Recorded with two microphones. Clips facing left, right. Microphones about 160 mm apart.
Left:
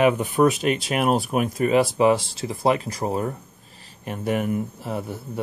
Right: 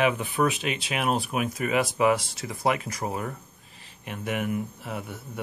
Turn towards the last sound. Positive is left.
turn(degrees=35)  # may be behind; listen again after turning